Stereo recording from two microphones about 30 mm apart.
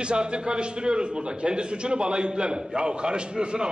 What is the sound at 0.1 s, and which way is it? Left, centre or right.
A man's voice, right.